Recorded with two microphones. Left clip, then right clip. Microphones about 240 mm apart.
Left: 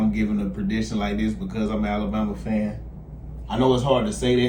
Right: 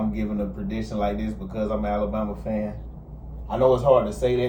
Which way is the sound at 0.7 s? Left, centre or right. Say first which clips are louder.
Right 1 dB; left.